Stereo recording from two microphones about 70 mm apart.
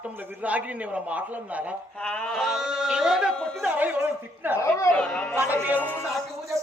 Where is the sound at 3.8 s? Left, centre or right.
Right.